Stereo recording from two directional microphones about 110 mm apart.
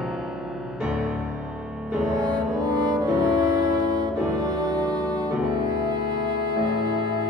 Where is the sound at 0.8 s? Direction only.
5° right (ahead or behind).